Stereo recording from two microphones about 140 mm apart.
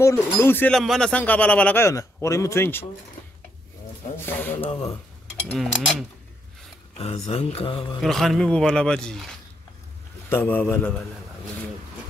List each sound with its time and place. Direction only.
0.0 s a man's voice: 20° left (ahead or behind)
0.7 s a man's voice: 5° left (ahead or behind)
1.9 s speech: 20° left (ahead or behind)
4.3 s a man's voice: 15° left (ahead or behind)
7.0 s speech: 45° left (ahead or behind)
8.0 s speech: centre (ahead or behind)
10.3 s a man's voice: 15° left (ahead or behind)